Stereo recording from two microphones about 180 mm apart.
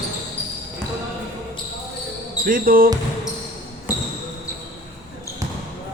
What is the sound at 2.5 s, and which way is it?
Speech, 50° right (ahead or behind).